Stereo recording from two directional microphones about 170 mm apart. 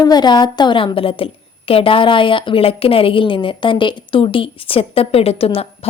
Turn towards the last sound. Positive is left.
turn(degrees=35)  # may be behind; listen again after turning